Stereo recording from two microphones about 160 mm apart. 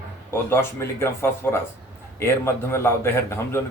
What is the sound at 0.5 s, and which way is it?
Speech, 15° left (ahead or behind).